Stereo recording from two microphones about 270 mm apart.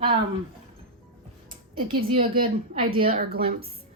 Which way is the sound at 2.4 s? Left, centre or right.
Right.